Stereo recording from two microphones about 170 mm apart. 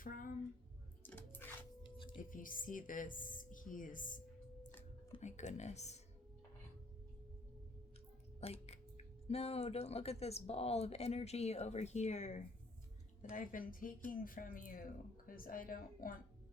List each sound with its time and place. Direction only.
0.0 s a sound: 55° left (ahead or behind)
1.0 s chewing: 10° left (ahead or behind)
2.3 s a woman's voice: 55° left (ahead or behind)
5.2 s speech: 45° left (ahead or behind)
8.4 s a woman's voice: 35° left (ahead or behind); by 16.1 s 55° left (ahead or behind)